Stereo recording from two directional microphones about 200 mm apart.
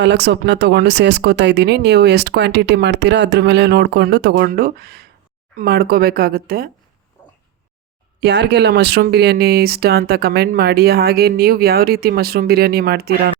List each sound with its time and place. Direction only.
0.0 s speech: 60° right (ahead or behind)
8.2 s speech: 55° right (ahead or behind)